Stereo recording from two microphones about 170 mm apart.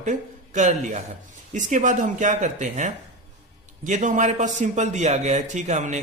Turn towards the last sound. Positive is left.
turn(degrees=-45)  # may be behind; listen again after turning